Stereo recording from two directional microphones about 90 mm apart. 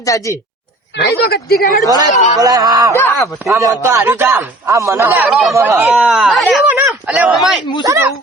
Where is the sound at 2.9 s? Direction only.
25° left (ahead or behind).